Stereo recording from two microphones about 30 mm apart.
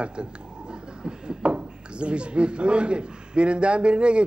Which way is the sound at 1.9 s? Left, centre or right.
Right.